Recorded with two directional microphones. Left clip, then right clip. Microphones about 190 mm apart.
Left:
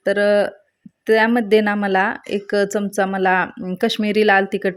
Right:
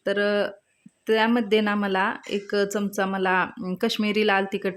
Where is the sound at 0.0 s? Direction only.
25° left (ahead or behind).